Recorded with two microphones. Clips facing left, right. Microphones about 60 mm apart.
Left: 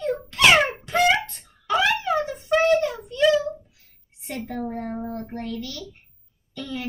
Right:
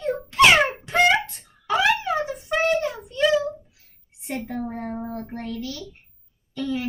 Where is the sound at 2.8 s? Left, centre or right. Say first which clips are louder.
Left 2 dB; right.